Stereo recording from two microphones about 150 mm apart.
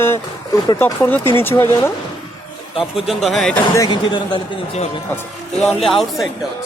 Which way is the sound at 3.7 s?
25° left (ahead or behind).